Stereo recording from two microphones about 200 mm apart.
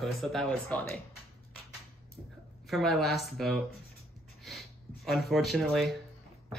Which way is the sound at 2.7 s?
Centre (ahead or behind).